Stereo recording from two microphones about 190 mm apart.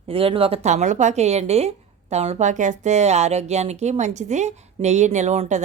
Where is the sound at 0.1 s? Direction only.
30° right (ahead or behind).